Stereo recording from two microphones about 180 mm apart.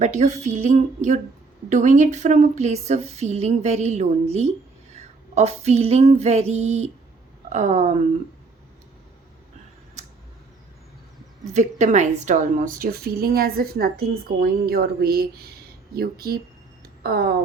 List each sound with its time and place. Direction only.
0.0 s a woman's voice: 40° right (ahead or behind)
4.9 s female singing: 35° right (ahead or behind)
7.5 s a woman's voice: 40° right (ahead or behind)
10.0 s a sound: 40° right (ahead or behind)
11.5 s a woman's voice: 40° right (ahead or behind); by 16.4 s 55° right (ahead or behind)
16.8 s a sound: 55° right (ahead or behind)